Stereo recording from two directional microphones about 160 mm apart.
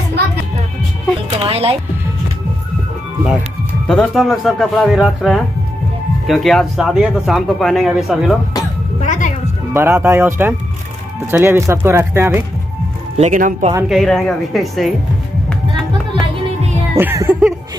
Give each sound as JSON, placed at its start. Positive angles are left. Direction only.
{"t": 1.3, "sound": "speech", "side_deg": -40}
{"t": 3.8, "sound": "speech", "side_deg": 5}
{"t": 9.0, "sound": "music", "side_deg": 50}
{"t": 9.8, "sound": "speech", "side_deg": -15}
{"t": 13.2, "sound": "speech", "side_deg": -55}
{"t": 13.8, "sound": "speech", "side_deg": 0}
{"t": 16.9, "sound": "speech", "side_deg": -15}